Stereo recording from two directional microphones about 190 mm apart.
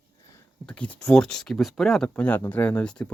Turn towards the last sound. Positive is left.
turn(degrees=5)  # may be behind; listen again after turning